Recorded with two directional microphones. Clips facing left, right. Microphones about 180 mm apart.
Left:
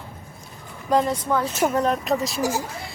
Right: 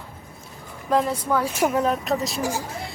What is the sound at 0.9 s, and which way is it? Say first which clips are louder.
Speech: left 1 dB; centre (ahead or behind).